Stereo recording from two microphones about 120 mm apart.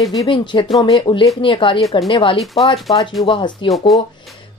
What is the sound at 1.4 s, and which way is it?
A woman's voice, 45° left (ahead or behind).